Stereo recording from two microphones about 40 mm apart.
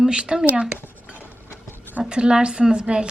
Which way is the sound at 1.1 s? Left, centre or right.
Left.